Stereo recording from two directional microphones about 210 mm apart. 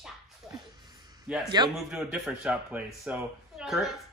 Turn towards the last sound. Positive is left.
turn(degrees=0)  # may be behind; listen again after turning